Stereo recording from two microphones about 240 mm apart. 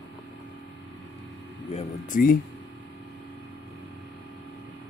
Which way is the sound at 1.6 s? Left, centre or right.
Left.